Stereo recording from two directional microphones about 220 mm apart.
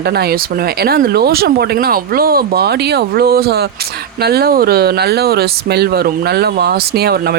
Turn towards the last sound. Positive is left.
turn(degrees=-45)  # may be behind; listen again after turning